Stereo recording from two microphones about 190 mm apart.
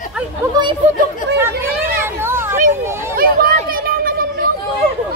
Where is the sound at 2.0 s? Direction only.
15° right (ahead or behind).